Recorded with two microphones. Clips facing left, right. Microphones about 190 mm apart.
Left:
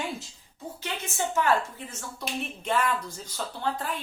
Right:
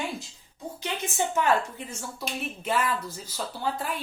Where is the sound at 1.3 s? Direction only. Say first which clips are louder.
Even; 20° right (ahead or behind).